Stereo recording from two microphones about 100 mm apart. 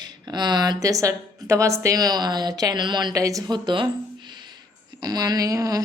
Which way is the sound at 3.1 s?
35° right (ahead or behind).